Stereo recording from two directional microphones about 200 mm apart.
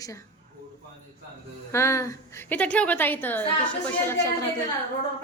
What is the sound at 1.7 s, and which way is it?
A woman's voice, 15° left (ahead or behind).